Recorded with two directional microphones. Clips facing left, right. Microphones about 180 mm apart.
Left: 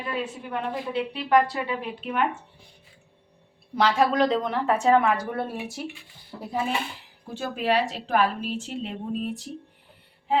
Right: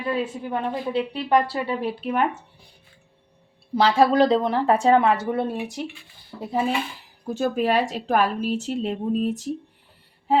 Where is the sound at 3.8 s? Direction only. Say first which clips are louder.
Right 4 dB; 30° right (ahead or behind).